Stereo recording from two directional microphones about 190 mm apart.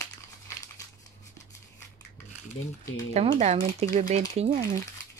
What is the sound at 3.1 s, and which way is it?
Speech, 35° right (ahead or behind).